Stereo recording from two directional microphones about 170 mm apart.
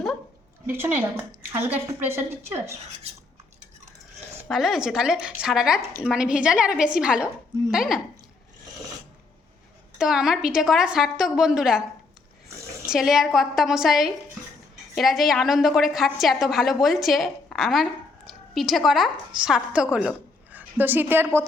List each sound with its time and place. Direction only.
0.7 s a woman's voice: 10° right (ahead or behind)
3.1 s cutlery: 40° right (ahead or behind)
4.4 s a woman's voice: centre (ahead or behind)
10.0 s a woman's voice: 5° right (ahead or behind)
12.9 s a woman's voice: centre (ahead or behind)